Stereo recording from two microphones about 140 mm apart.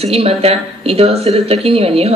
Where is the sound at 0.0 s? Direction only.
45° right (ahead or behind).